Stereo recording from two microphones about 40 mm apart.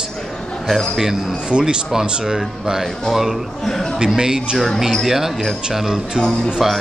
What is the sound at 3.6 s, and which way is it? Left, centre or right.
Speech, centre.